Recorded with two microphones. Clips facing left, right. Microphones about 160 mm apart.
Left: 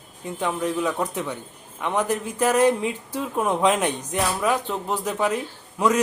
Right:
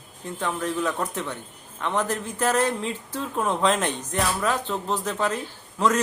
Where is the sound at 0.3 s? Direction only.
15° left (ahead or behind).